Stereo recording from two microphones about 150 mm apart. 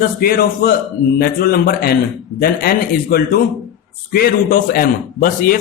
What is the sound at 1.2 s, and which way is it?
A man's voice, 85° left.